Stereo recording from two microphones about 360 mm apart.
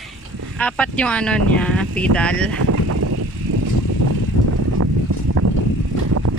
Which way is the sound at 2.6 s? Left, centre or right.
Right.